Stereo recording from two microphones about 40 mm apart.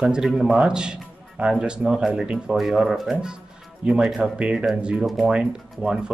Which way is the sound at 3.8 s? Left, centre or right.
Centre.